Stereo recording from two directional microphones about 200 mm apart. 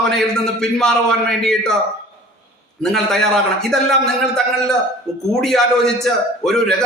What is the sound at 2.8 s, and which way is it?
A man's voice, centre (ahead or behind).